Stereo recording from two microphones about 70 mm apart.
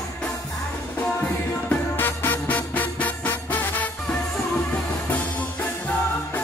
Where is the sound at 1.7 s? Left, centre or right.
Left.